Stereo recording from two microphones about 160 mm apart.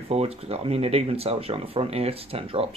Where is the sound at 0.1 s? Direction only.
40° right (ahead or behind).